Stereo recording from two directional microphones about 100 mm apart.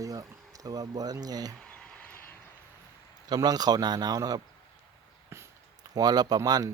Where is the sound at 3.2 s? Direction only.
40° right (ahead or behind).